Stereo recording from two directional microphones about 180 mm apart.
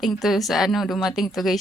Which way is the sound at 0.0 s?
Centre (ahead or behind).